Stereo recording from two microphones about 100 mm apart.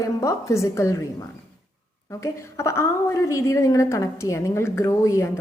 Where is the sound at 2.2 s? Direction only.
30° left (ahead or behind).